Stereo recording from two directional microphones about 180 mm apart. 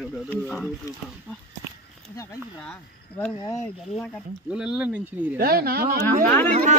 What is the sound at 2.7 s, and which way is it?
Speech, 5° left (ahead or behind).